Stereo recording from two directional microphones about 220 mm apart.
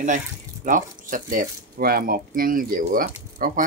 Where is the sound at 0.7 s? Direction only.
35° right (ahead or behind).